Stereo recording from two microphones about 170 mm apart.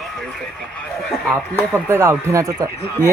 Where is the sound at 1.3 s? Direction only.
10° left (ahead or behind).